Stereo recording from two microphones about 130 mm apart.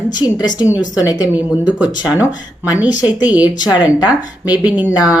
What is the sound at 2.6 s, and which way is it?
Speech, 10° right (ahead or behind).